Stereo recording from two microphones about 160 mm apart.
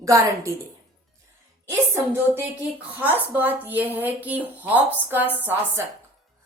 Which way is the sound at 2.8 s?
10° right (ahead or behind).